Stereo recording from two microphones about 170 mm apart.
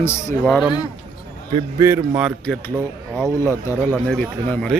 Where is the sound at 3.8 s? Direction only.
5° left (ahead or behind).